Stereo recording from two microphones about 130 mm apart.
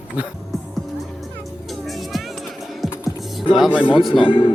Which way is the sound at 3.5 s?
5° right (ahead or behind).